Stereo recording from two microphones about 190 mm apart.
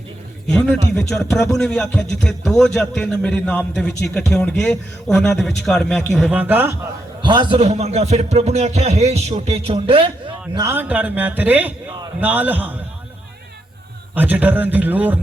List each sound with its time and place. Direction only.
0.4 s a man's voice: centre (ahead or behind)
7.2 s a man's voice: 25° right (ahead or behind)
10.5 s a man's voice: 15° right (ahead or behind)
14.2 s a man's voice: 10° right (ahead or behind)